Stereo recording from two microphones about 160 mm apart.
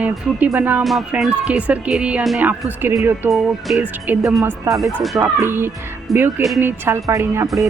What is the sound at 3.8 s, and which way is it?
Speech, 10° right (ahead or behind).